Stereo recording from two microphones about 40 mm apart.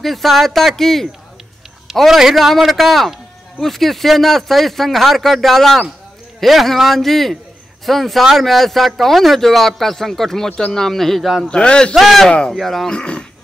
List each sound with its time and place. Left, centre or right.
0.0 s speech: centre
2.0 s a man's voice: centre
11.5 s a man's voice: left
11.9 s speech: centre
12.3 s a man's voice: left
12.5 s speech: centre
12.8 s a man's voice: left